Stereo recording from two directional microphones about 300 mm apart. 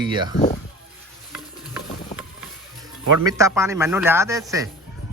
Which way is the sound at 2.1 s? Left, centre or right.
Left.